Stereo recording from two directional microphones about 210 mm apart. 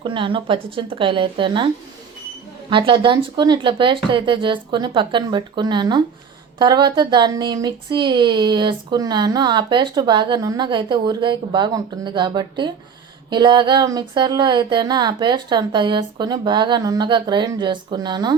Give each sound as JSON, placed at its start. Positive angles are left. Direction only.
{"t": 0.0, "sound": "speech", "side_deg": -25}
{"t": 2.6, "sound": "speech", "side_deg": -25}